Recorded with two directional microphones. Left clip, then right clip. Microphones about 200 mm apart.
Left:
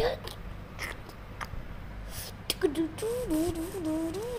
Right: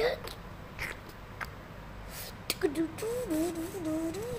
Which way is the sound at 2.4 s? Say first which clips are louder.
Left 2 dB; 5° left (ahead or behind).